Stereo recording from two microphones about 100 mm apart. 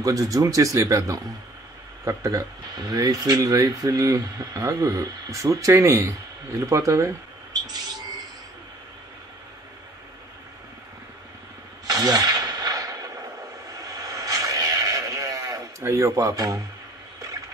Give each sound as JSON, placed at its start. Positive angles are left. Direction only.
{"t": 0.0, "sound": "speech", "side_deg": -35}
{"t": 11.9, "sound": "a sound", "side_deg": -40}
{"t": 13.7, "sound": "vehicle", "side_deg": -35}